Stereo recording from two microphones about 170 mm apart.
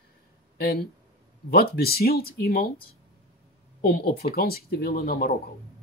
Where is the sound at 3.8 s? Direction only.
60° left (ahead or behind).